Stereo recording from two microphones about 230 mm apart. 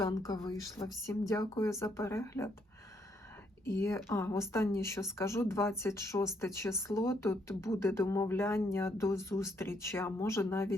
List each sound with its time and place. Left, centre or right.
0.0 s a woman's voice: centre
3.7 s a woman's voice: centre